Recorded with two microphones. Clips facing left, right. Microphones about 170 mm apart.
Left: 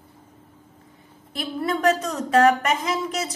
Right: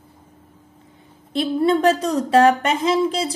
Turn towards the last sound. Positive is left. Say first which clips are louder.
# right 7 dB
turn(degrees=-30)  # may be behind; listen again after turning